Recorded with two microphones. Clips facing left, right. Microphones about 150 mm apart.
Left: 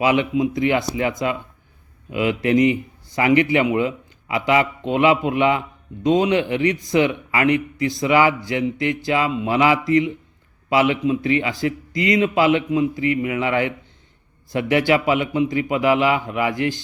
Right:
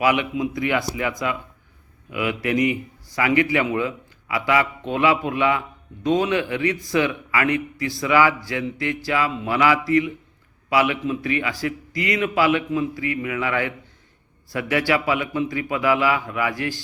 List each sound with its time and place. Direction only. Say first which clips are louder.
0.0 s a man's voice: left 3 dB; 25° left (ahead or behind)